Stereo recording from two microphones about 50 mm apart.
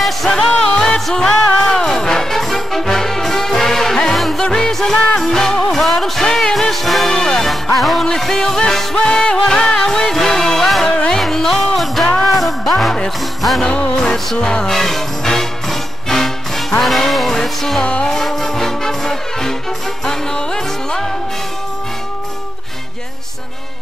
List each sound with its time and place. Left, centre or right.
0.7 s music: centre
13.7 s music: centre